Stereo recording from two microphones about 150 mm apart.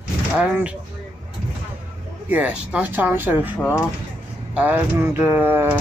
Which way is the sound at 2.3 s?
10° right (ahead or behind).